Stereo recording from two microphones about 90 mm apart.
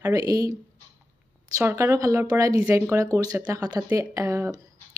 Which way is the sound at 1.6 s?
30° right (ahead or behind).